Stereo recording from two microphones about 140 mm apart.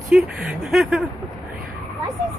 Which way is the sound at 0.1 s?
5° right (ahead or behind).